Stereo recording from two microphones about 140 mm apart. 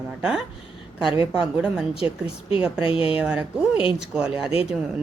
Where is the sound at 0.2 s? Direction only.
5° right (ahead or behind).